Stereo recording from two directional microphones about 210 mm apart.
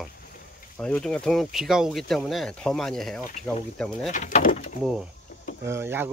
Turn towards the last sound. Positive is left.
turn(degrees=-10)  # may be behind; listen again after turning